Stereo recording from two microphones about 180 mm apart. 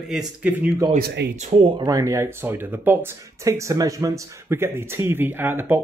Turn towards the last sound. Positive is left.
turn(degrees=-10)  # may be behind; listen again after turning